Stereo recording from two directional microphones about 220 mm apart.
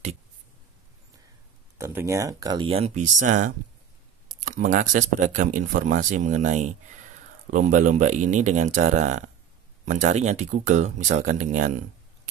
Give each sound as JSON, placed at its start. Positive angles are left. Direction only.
{"t": 1.8, "sound": "speech", "side_deg": -10}